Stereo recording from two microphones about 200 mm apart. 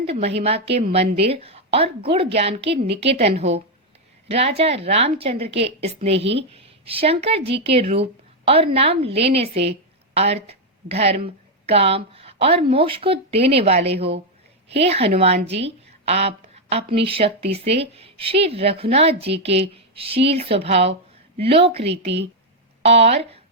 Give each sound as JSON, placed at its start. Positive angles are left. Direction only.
{"t": 0.0, "sound": "a woman's voice", "side_deg": -30}